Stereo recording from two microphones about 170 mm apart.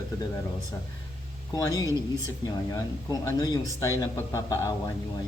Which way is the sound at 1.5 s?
20° left (ahead or behind).